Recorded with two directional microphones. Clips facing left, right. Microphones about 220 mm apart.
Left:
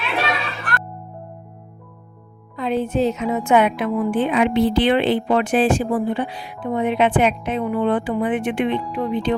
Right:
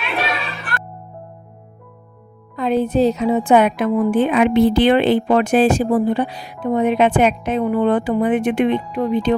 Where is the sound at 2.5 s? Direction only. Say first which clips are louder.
Right 4 dB; 45° right (ahead or behind).